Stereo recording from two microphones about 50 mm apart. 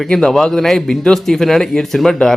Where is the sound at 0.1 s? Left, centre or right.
Centre.